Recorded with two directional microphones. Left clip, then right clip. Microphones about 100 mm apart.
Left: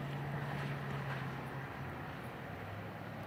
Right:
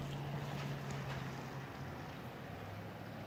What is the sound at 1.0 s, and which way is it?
Vehicle, 5° right (ahead or behind).